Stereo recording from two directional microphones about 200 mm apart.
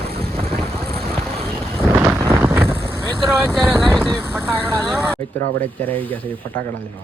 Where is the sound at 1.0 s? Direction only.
5° left (ahead or behind).